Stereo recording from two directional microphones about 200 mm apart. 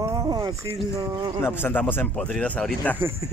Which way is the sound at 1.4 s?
10° left (ahead or behind).